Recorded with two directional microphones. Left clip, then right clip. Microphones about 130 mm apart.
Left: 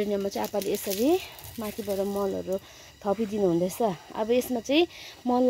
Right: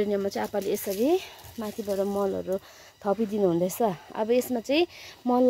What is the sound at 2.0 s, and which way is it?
Speech, 15° right (ahead or behind).